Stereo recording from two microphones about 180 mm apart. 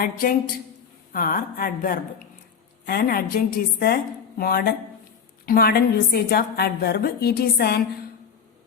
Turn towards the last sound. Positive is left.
turn(degrees=60)  # may be behind; listen again after turning